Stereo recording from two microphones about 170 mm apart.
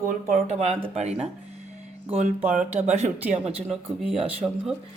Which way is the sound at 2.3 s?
40° right (ahead or behind).